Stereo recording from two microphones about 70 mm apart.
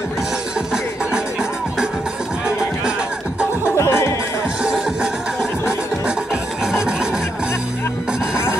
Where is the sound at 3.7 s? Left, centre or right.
Left.